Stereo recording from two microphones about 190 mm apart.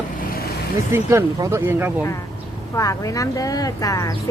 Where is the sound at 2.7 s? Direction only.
15° left (ahead or behind).